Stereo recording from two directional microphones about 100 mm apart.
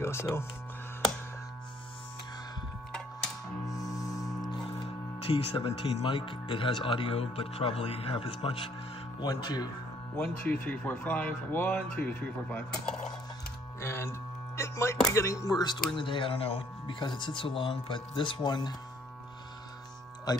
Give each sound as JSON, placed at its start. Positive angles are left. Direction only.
{"t": 0.0, "sound": "speech", "side_deg": 25}
{"t": 3.6, "sound": "music", "side_deg": 35}
{"t": 5.2, "sound": "speech", "side_deg": 70}
{"t": 9.2, "sound": "speech", "side_deg": 45}
{"t": 10.1, "sound": "speech", "side_deg": 10}
{"t": 13.7, "sound": "music", "side_deg": 25}
{"t": 15.1, "sound": "speech", "side_deg": 30}
{"t": 17.0, "sound": "speech", "side_deg": 50}